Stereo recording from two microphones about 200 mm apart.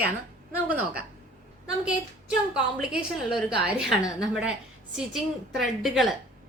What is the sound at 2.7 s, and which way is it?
A woman's voice, centre (ahead or behind).